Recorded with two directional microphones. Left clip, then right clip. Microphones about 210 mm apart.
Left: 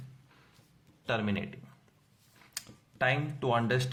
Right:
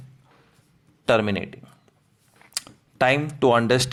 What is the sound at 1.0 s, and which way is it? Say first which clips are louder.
Speech: right 12 dB; 45° right (ahead or behind).